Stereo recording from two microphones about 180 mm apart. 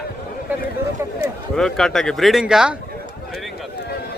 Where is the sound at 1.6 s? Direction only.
Centre (ahead or behind).